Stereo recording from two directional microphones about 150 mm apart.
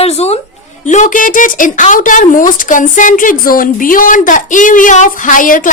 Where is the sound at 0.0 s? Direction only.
45° left (ahead or behind).